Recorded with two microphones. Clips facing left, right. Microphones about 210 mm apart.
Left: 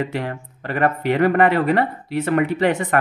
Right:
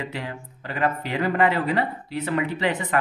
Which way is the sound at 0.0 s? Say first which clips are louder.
Left 7 dB; 55° left (ahead or behind).